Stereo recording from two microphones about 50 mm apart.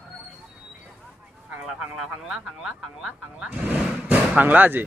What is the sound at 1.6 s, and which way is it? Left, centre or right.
Speech, centre.